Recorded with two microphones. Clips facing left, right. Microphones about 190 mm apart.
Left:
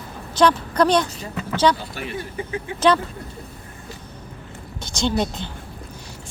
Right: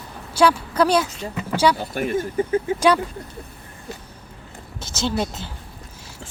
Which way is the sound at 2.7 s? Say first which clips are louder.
Left 2 dB; 10° right (ahead or behind).